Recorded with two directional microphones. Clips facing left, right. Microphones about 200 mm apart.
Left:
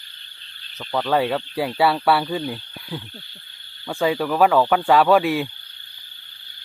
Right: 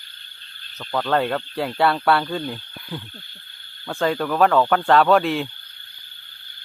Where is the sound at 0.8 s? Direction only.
5° left (ahead or behind).